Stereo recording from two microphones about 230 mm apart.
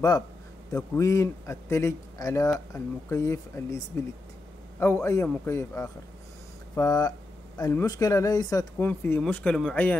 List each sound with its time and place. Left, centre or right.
0.7 s a man's voice: centre